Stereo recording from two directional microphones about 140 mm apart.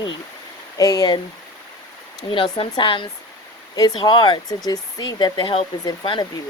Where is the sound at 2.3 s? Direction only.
35° left (ahead or behind).